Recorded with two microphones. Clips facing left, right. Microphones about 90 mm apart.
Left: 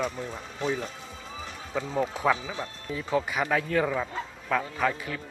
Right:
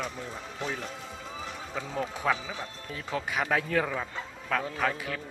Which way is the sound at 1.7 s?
10° left (ahead or behind).